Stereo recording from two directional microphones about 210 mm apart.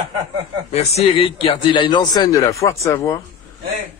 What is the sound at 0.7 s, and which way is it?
A man's voice, 30° left (ahead or behind).